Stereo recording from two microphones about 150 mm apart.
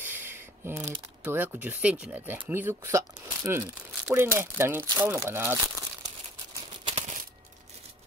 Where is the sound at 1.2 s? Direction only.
15° right (ahead or behind).